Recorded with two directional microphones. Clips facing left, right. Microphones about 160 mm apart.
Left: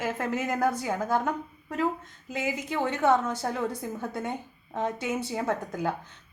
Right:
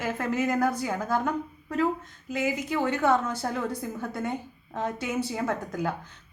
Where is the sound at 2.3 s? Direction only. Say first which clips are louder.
Right 2 dB; 25° left (ahead or behind).